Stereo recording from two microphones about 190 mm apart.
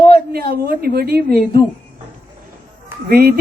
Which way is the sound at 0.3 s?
55° right (ahead or behind).